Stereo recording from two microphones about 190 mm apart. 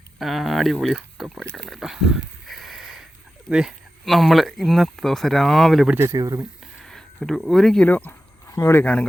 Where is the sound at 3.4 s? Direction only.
Centre (ahead or behind).